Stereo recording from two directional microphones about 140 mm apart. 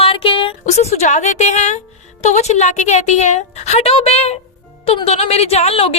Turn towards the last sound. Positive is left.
turn(degrees=45)  # may be behind; listen again after turning